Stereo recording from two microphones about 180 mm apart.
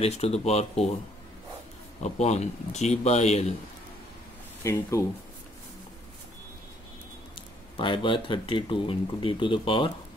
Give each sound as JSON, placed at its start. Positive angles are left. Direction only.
{"t": 0.0, "sound": "speech", "side_deg": 35}
{"t": 2.0, "sound": "speech", "side_deg": 40}
{"t": 4.6, "sound": "speech", "side_deg": 15}
{"t": 7.7, "sound": "speech", "side_deg": 25}